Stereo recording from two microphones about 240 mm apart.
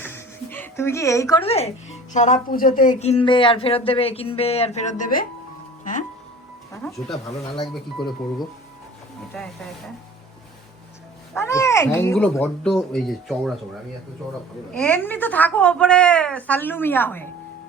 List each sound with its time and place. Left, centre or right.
0.0 s a sound: centre
1.5 s speech: left
5.8 s music: left
7.1 s speech: left
7.6 s speech: centre
11.3 s a woman's voice: centre
14.7 s a woman's voice: centre